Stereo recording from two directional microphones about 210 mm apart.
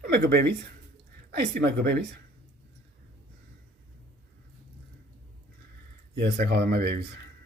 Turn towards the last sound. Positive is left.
turn(degrees=-50)  # may be behind; listen again after turning